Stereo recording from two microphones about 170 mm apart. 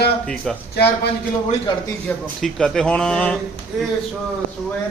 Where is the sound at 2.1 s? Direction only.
10° left (ahead or behind).